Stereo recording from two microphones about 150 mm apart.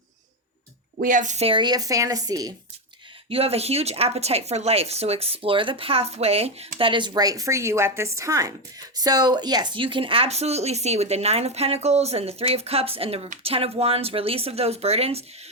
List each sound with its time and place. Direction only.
0.9 s a woman's voice: 60° right (ahead or behind)
1.5 s speech: 30° right (ahead or behind)
3.2 s speech: 40° right (ahead or behind)